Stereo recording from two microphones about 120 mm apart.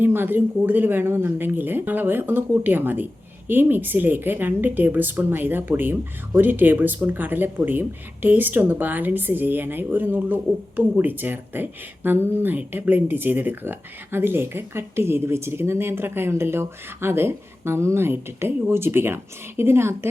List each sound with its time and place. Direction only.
0.0 s speech: 15° right (ahead or behind)